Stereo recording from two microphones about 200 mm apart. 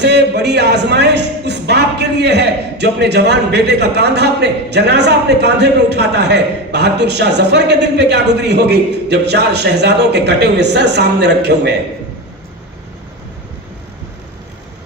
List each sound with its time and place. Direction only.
0.0 s a man's voice: 55° right (ahead or behind)